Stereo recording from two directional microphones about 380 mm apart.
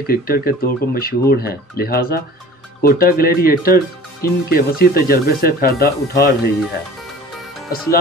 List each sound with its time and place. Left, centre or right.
0.0 s speech: left